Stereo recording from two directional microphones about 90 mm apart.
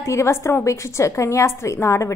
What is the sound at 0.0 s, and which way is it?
A woman's voice, 35° left (ahead or behind).